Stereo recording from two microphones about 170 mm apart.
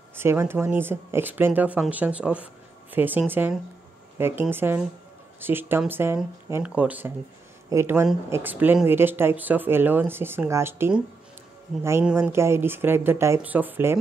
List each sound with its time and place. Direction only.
0.1 s speech: 15° right (ahead or behind)